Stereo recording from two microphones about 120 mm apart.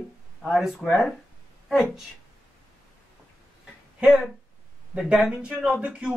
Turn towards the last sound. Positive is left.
turn(degrees=-10)  # may be behind; listen again after turning